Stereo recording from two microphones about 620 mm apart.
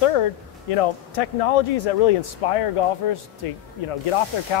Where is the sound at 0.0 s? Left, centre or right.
Left.